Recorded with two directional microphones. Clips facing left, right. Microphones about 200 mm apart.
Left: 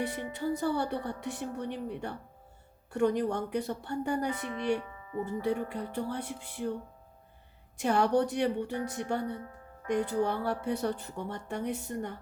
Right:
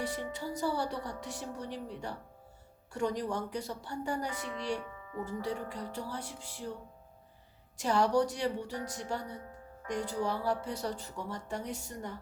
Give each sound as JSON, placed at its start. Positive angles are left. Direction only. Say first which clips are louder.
{"t": 0.0, "sound": "speech", "louder": "left 4 dB", "side_deg": 60}
{"t": 7.8, "sound": "speech", "louder": "left 2 dB", "side_deg": 60}